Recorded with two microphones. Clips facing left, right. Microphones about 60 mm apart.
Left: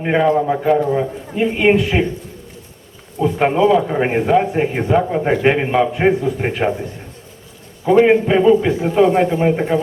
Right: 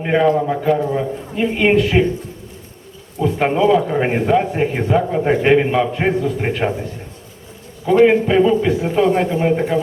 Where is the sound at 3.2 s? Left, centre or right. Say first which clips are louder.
Left 1 dB; centre.